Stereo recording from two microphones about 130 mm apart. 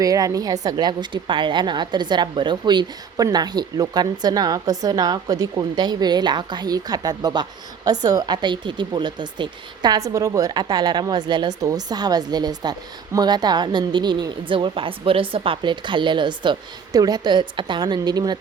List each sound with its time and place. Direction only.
0.0 s a woman's voice: 30° right (ahead or behind)